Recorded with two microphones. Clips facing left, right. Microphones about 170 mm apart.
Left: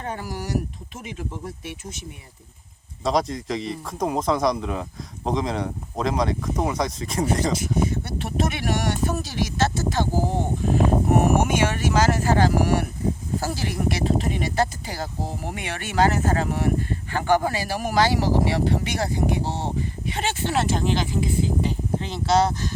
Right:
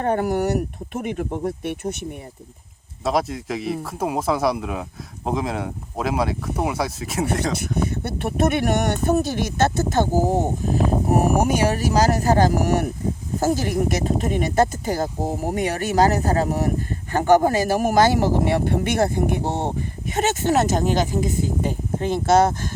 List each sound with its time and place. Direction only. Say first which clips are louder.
0.0 s speech: right 11 dB; 55° right (ahead or behind)
3.0 s speech: right 1 dB; 5° right (ahead or behind)
8.0 s speech: right 5 dB; 55° right (ahead or behind)